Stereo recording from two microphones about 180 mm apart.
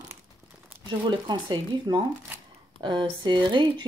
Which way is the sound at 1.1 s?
25° right (ahead or behind).